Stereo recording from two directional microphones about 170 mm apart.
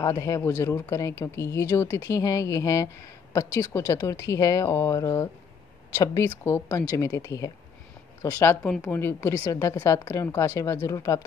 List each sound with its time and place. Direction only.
0.0 s a woman's voice: 20° left (ahead or behind)